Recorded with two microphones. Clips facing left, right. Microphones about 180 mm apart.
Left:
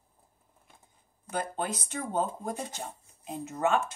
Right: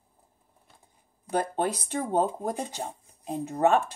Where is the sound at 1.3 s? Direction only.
35° right (ahead or behind).